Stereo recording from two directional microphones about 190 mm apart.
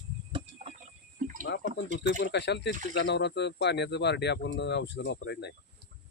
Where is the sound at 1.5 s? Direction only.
70° left (ahead or behind).